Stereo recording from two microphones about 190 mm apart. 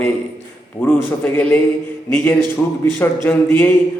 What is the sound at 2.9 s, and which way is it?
Speech, 10° left (ahead or behind).